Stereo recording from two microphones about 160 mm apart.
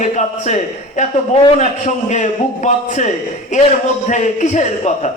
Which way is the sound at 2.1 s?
50° left (ahead or behind).